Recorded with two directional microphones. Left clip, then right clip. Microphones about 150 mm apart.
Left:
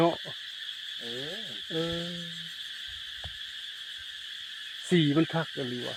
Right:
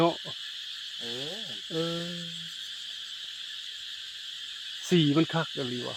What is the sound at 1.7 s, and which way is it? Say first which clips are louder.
Speech: even; 10° right (ahead or behind).